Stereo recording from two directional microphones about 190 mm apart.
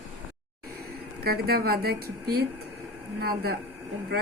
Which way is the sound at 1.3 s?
55° right (ahead or behind).